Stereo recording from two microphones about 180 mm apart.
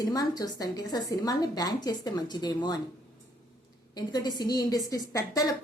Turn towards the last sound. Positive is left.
turn(degrees=20)  # may be behind; listen again after turning